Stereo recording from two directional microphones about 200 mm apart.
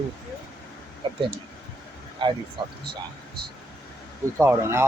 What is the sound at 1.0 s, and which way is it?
Speech, 25° right (ahead or behind).